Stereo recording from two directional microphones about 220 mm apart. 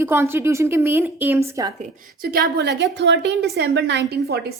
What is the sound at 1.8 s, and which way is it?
A woman's voice, 45° right (ahead or behind).